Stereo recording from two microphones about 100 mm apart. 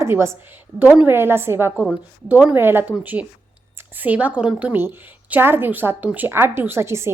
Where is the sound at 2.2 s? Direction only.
15° right (ahead or behind).